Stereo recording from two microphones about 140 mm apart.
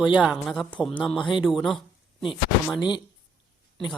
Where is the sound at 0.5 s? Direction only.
5° left (ahead or behind).